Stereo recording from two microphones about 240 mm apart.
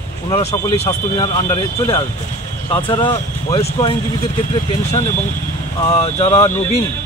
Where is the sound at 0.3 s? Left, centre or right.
Left.